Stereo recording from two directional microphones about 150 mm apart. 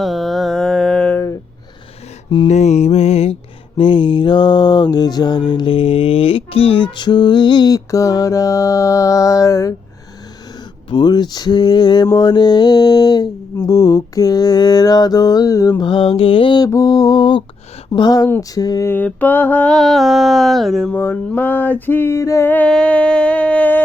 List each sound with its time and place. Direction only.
0.0 s a sound: centre (ahead or behind)
2.5 s music: 50° left (ahead or behind)
3.8 s mantra: 35° left (ahead or behind); by 9.7 s 20° left (ahead or behind)
10.8 s mantra: 30° left (ahead or behind)
15.8 s mantra: 35° left (ahead or behind)
16.6 s mantra: 20° left (ahead or behind)
18.3 s a sound: 20° left (ahead or behind)